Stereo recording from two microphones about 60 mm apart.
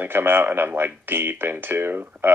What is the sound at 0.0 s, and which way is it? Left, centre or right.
Speech, right.